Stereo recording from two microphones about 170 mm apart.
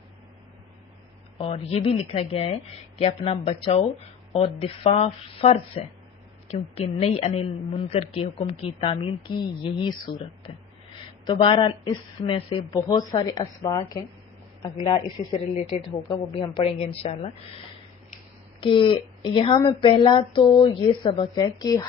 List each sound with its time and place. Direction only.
1.4 s a woman's voice: 35° left (ahead or behind)
14.8 s a woman's voice: 35° left (ahead or behind)
18.6 s a woman's voice: 30° left (ahead or behind)